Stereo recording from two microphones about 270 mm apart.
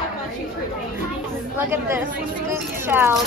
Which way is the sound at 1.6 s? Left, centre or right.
Centre.